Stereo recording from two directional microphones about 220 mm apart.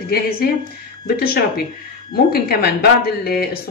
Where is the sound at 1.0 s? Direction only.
45° left (ahead or behind).